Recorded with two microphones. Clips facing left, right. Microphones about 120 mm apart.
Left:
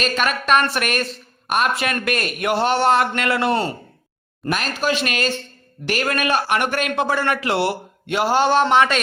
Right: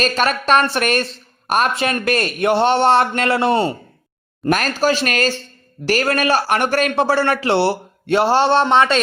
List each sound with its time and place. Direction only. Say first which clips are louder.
0.0 s a man's voice: right 3 dB; 35° right (ahead or behind)
4.5 s speech: right 4 dB; 40° right (ahead or behind)